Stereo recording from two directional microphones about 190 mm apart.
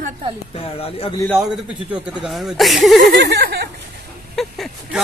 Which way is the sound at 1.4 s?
5° right (ahead or behind).